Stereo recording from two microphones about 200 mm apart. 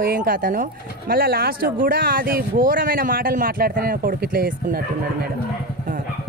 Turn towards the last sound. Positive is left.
turn(degrees=-45)  # may be behind; listen again after turning